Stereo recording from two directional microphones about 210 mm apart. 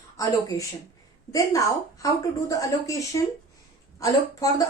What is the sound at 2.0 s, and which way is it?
Speech, 15° left (ahead or behind).